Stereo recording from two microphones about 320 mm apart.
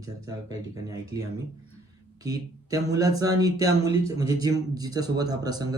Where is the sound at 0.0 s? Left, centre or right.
Centre.